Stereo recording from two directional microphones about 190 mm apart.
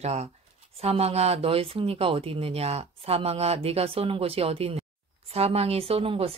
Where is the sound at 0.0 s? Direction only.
35° right (ahead or behind).